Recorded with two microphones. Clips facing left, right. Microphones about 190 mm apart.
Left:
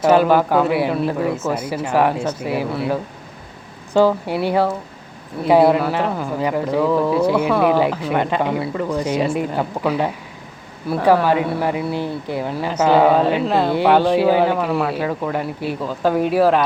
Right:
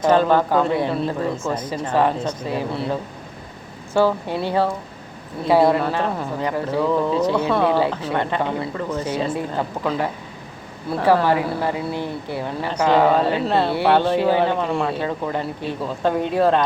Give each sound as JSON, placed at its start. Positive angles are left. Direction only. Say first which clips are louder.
{"t": 0.0, "sound": "speech", "louder": "left 2 dB", "side_deg": 10}